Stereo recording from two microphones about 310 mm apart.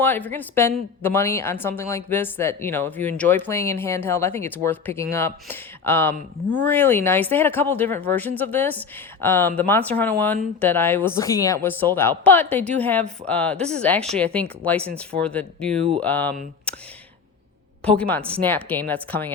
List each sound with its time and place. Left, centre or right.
0.0 s speech: centre
17.8 s speech: centre